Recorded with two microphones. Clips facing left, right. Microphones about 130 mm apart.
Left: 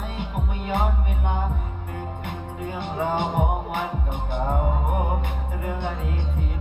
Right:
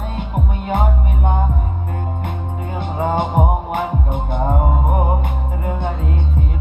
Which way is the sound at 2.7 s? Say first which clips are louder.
Right 6 dB; 50° right (ahead or behind).